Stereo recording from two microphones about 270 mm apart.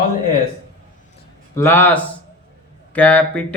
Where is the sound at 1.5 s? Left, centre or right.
Centre.